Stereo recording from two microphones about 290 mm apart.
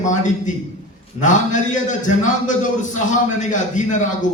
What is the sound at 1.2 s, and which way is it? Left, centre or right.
A man's voice, left.